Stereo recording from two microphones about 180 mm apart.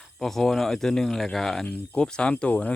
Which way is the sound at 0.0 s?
Centre (ahead or behind).